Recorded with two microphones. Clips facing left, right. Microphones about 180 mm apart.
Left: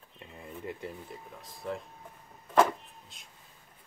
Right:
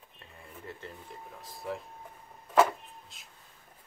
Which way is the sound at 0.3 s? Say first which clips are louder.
Left 6 dB; 15° left (ahead or behind).